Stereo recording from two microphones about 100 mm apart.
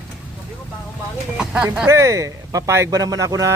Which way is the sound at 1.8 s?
30° right (ahead or behind).